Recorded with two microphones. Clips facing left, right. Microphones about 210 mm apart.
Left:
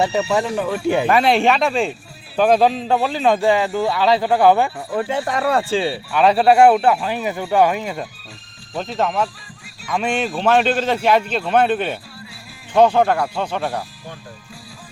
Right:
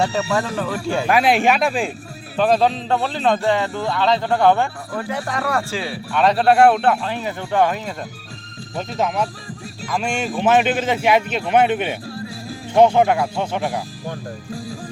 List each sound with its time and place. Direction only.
0.0 s speech: 20° left (ahead or behind)
1.0 s a man's voice: centre (ahead or behind)
4.9 s speech: 25° left (ahead or behind)
6.1 s a man's voice: 5° left (ahead or behind)
10.3 s a man's voice: 15° right (ahead or behind)